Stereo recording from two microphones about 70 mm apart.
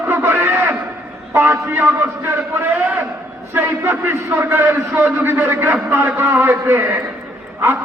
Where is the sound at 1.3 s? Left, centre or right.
Right.